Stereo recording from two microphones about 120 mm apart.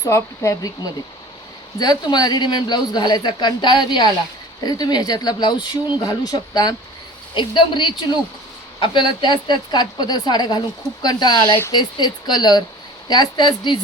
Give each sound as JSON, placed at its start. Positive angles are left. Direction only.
{"t": 0.0, "sound": "speech", "side_deg": 25}
{"t": 1.8, "sound": "a man's voice", "side_deg": 35}